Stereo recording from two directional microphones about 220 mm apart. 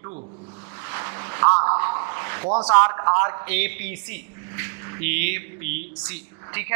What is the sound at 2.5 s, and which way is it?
Speech, 25° right (ahead or behind).